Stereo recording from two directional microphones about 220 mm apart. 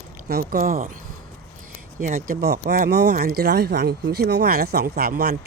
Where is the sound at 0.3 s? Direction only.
40° right (ahead or behind).